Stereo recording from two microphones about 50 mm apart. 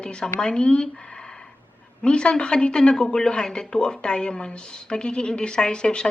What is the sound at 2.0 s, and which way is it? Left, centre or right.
Speech, centre.